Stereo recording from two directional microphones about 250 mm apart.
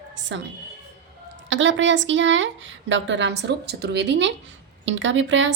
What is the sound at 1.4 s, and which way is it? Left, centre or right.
A woman's voice, right.